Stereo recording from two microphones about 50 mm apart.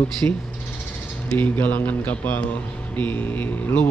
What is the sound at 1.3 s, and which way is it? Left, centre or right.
A man's voice, left.